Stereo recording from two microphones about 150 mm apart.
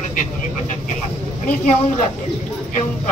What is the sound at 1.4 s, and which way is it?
Speech, 55° left (ahead or behind).